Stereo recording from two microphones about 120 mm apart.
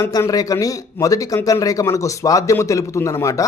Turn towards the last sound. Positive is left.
turn(degrees=25)  # may be behind; listen again after turning